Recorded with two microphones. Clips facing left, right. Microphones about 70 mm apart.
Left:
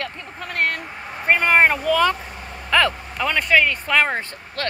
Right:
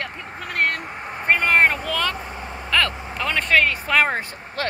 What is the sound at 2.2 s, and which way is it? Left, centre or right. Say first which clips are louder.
Vehicle: right 3 dB; centre.